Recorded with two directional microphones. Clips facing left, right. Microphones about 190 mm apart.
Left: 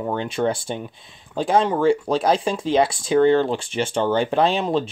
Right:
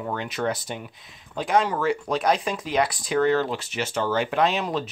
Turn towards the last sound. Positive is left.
turn(degrees=30)  # may be behind; listen again after turning